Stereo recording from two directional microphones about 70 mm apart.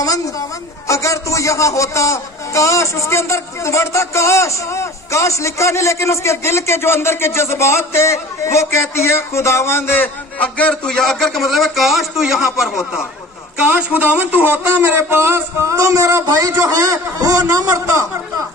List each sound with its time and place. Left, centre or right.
0.8 s a man's voice: left
10.4 s a man's voice: centre
13.6 s a man's voice: right